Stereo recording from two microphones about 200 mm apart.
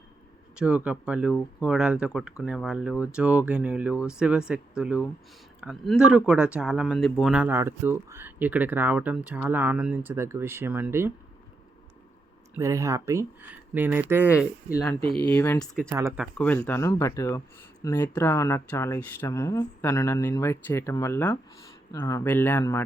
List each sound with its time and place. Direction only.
0.5 s speech: 5° right (ahead or behind)
12.5 s speech: 15° right (ahead or behind)
15.0 s speech: 25° right (ahead or behind)
15.3 s speech: 10° left (ahead or behind)
15.9 s speech: 15° right (ahead or behind)
16.1 s speech: 5° left (ahead or behind)